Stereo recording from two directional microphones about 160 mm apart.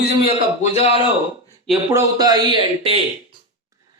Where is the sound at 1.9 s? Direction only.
20° right (ahead or behind).